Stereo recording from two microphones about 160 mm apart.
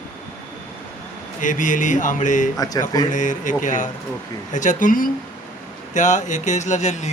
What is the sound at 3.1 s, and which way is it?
A man's voice, 50° left (ahead or behind).